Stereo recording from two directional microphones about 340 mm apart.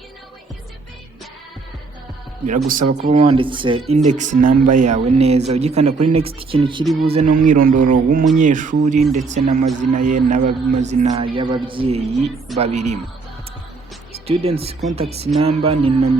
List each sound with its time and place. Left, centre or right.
2.6 s speech: right
14.4 s speech: centre